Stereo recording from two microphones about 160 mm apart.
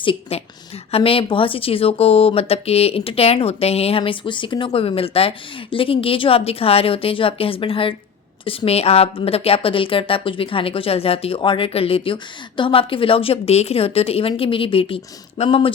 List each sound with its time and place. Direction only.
0.0 s a woman's voice: 35° left (ahead or behind)